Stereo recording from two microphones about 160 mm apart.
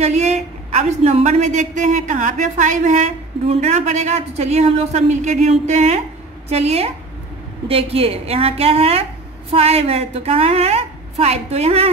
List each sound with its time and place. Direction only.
0.0 s a woman's voice: 45° right (ahead or behind)